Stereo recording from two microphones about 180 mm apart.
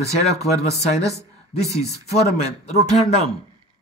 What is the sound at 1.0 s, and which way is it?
Speech, 15° right (ahead or behind).